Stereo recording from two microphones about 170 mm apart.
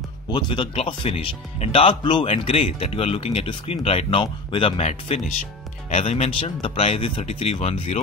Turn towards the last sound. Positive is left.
turn(degrees=35)  # may be behind; listen again after turning